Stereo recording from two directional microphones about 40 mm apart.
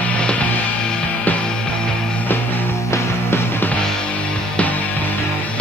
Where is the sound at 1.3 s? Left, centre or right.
Left.